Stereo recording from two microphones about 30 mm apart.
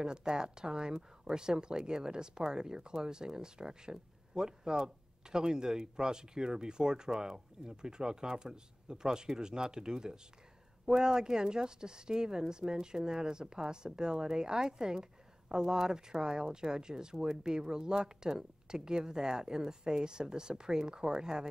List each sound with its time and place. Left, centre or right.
0.0 s speech: right